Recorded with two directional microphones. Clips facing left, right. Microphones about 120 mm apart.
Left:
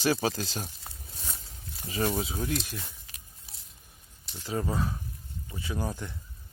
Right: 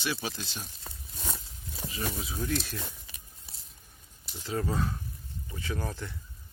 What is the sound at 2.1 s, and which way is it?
Speech, 25° left (ahead or behind).